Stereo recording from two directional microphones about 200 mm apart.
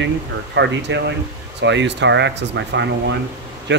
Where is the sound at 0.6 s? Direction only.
60° right (ahead or behind).